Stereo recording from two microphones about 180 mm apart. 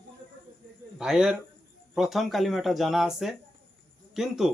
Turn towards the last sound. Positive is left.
turn(degrees=0)  # may be behind; listen again after turning